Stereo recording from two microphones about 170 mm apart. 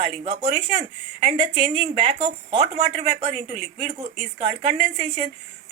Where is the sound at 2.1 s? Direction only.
35° right (ahead or behind).